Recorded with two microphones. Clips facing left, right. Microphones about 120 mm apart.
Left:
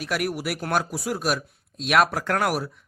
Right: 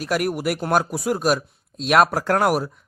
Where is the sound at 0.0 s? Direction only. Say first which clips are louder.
Right 4 dB; 45° right (ahead or behind).